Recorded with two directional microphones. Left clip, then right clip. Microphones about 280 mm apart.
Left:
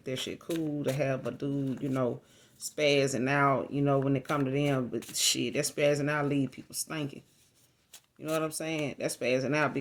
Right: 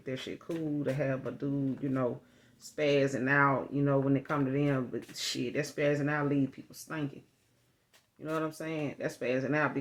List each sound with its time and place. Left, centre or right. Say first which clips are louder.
0.0 s speech: left 3 dB; left
2.8 s speech: left 2 dB; left
8.2 s speech: left 3 dB; left